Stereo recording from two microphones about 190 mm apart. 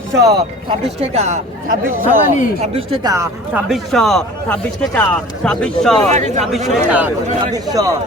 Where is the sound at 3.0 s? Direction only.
15° right (ahead or behind).